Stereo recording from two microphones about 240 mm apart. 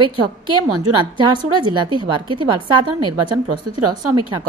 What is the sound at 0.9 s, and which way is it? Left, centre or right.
A woman's voice, centre.